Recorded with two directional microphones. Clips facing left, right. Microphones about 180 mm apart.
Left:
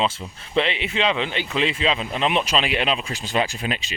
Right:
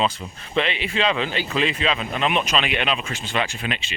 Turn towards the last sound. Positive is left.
turn(degrees=35)  # may be behind; listen again after turning